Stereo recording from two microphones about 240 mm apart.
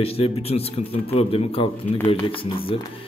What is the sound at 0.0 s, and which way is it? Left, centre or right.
A man's voice, left.